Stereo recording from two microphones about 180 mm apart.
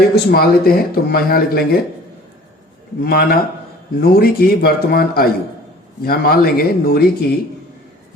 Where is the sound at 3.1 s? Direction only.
55° left (ahead or behind).